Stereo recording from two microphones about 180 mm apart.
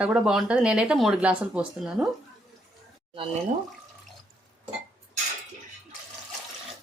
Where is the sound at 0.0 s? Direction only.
5° right (ahead or behind).